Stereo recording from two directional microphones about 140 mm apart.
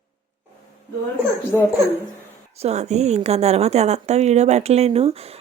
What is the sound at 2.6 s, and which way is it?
A woman's voice, 50° right (ahead or behind).